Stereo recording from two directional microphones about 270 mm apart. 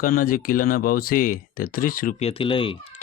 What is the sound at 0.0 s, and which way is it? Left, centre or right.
Speech, left.